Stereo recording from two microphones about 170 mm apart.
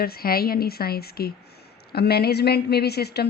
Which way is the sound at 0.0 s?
65° left (ahead or behind).